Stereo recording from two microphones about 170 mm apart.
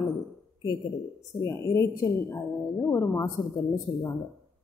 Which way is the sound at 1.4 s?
20° left (ahead or behind).